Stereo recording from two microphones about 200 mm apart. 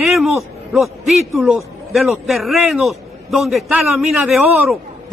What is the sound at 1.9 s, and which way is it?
A man's voice, centre (ahead or behind).